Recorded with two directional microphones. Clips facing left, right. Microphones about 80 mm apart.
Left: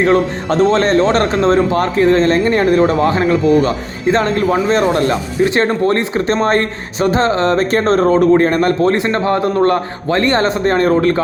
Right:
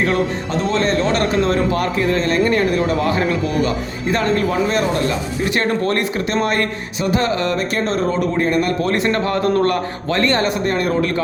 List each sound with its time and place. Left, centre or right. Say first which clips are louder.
0.0 s a man's voice: left 5 dB; left
5.5 s a man's voice: left 3 dB; left
8.8 s a man's voice: left 4 dB; left